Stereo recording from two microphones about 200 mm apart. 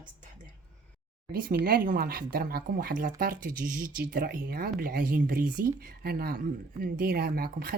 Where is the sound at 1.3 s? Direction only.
45° right (ahead or behind).